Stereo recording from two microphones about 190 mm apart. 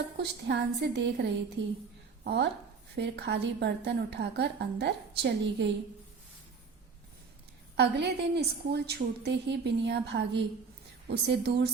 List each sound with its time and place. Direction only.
0.2 s a woman's voice: 60° right (ahead or behind)
7.8 s a woman's voice: 60° right (ahead or behind)